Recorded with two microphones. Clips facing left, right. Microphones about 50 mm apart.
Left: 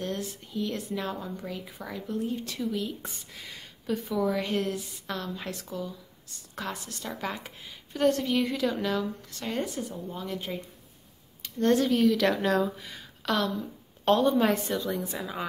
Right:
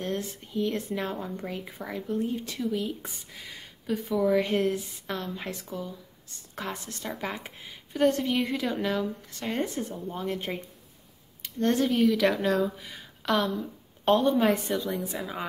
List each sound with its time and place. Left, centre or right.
0.0 s speech: right; by 4.4 s centre
4.4 s a woman's voice: right
11.9 s speech: centre
12.8 s a sound: centre
14.0 s speech: centre